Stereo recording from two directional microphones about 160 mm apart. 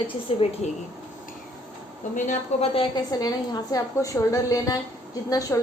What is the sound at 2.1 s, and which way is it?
Speech, 50° left (ahead or behind).